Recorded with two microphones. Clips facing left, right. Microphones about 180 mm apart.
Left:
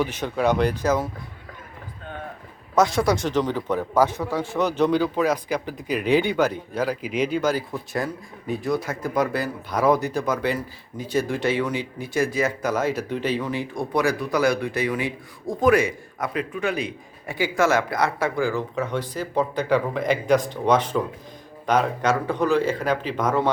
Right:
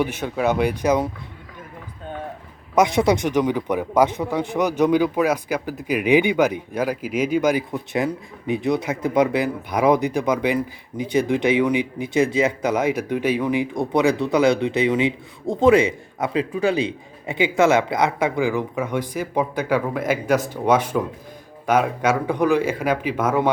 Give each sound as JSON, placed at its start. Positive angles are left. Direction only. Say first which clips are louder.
{"t": 0.0, "sound": "a man's voice", "louder": "right 1 dB", "side_deg": -10}
{"t": 2.7, "sound": "a man's voice", "louder": "right 3 dB", "side_deg": -20}